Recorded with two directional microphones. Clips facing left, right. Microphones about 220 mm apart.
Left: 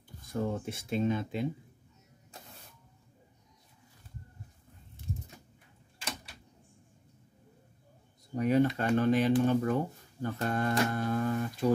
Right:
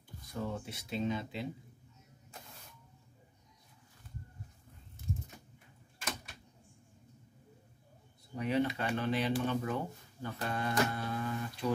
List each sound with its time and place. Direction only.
0.3 s speech: 50° left (ahead or behind)
8.4 s speech: 45° left (ahead or behind)